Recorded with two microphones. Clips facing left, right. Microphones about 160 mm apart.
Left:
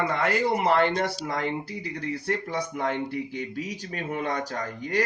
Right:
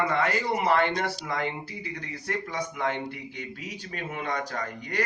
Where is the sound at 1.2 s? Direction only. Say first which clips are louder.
Left 2 dB; 40° left (ahead or behind).